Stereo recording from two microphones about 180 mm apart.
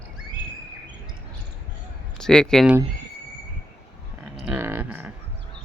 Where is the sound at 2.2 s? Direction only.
5° left (ahead or behind).